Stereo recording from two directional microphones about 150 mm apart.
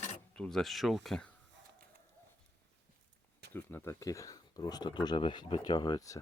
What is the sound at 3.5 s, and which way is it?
Speech, 15° left (ahead or behind).